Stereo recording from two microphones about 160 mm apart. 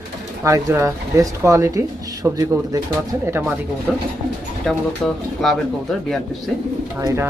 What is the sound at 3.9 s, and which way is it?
Speech, 5° right (ahead or behind).